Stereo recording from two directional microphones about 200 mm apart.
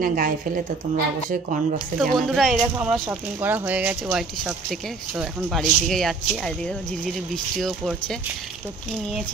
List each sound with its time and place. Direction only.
0.0 s a woman's voice: 45° right (ahead or behind)
2.1 s speech: centre (ahead or behind)